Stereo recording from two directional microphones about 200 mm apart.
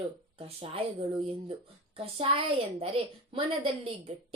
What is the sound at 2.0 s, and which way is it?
A woman's voice, 25° right (ahead or behind).